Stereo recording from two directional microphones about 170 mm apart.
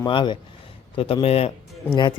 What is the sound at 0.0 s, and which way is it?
A man's voice, 30° left (ahead or behind).